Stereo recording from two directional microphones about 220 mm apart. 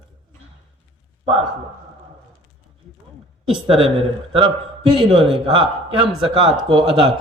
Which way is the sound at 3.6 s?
25° right (ahead or behind).